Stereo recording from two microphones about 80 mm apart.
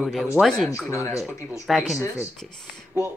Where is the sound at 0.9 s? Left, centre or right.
Left.